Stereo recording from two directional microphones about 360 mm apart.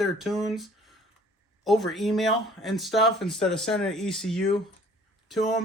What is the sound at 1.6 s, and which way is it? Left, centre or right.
Speech, centre.